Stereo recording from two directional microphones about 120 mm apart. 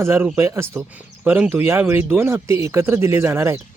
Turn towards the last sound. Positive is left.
turn(degrees=-20)  # may be behind; listen again after turning